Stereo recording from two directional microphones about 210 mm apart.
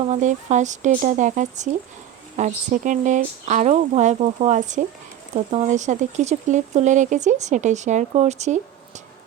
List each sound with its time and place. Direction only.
0.1 s speech: 35° right (ahead or behind)